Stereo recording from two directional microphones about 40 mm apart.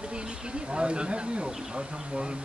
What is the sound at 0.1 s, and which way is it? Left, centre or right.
Speech, right.